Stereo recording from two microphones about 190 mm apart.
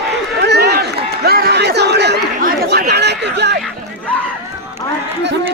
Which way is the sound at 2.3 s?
50° right (ahead or behind).